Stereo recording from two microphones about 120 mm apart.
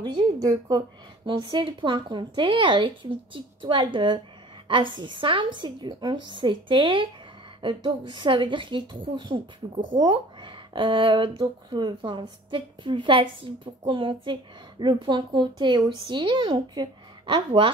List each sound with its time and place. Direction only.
0.0 s speech: 40° right (ahead or behind)